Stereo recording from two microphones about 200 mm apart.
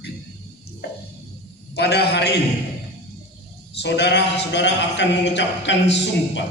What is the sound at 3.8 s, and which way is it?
Speech, 60° left (ahead or behind).